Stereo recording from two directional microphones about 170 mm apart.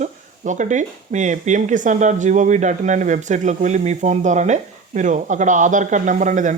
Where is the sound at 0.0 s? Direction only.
45° right (ahead or behind).